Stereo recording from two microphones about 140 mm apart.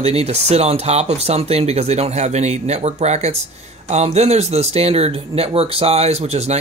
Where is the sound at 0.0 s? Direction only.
50° right (ahead or behind).